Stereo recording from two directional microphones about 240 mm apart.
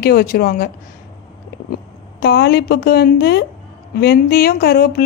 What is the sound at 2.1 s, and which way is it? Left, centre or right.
Speech, left.